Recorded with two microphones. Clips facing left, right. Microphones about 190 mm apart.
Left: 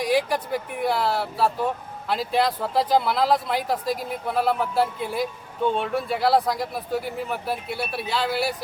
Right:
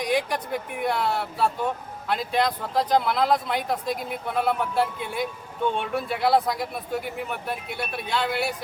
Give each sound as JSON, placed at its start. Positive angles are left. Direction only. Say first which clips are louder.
{"t": 0.0, "sound": "speech", "louder": "left 3 dB", "side_deg": 0}